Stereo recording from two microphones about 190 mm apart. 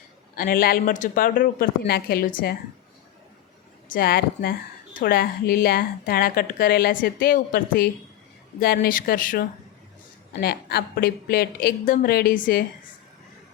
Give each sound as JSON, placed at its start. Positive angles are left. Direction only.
{"t": 0.3, "sound": "a woman's voice", "side_deg": 50}
{"t": 3.8, "sound": "a woman's voice", "side_deg": 50}